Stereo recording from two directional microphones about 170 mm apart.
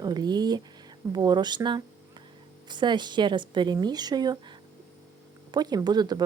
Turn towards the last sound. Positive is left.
turn(degrees=-25)  # may be behind; listen again after turning